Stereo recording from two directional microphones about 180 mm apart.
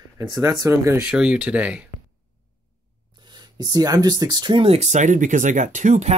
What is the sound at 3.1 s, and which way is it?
Speech, 25° right (ahead or behind).